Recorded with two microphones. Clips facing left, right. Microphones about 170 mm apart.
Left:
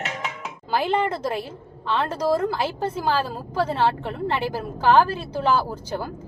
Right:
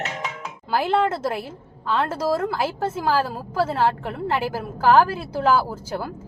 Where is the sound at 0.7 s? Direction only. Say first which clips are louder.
Right 2 dB; 5° right (ahead or behind).